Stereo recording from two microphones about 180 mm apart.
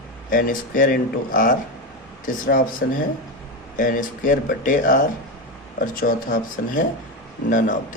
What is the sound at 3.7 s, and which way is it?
Speech, 50° left (ahead or behind).